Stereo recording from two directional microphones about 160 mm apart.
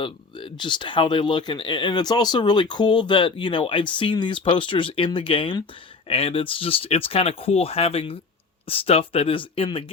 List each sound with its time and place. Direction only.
0.0 s speech: 30° left (ahead or behind)